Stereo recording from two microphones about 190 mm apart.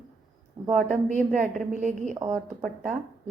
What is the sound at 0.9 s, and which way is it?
A woman's voice, 40° right (ahead or behind).